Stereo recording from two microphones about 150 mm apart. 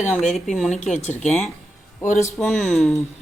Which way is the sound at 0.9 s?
50° left (ahead or behind).